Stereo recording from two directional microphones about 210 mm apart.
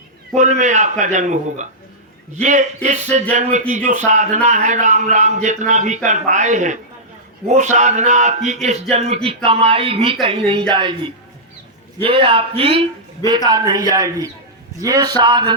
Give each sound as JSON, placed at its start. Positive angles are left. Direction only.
{"t": 0.3, "sound": "a man's voice", "side_deg": -35}